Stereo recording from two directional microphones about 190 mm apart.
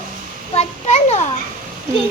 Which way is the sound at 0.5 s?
35° left (ahead or behind).